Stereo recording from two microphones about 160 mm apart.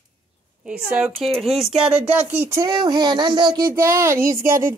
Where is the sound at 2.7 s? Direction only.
30° right (ahead or behind).